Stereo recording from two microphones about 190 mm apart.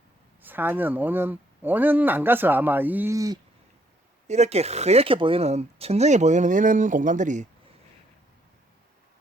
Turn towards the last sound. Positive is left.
turn(degrees=-40)  # may be behind; listen again after turning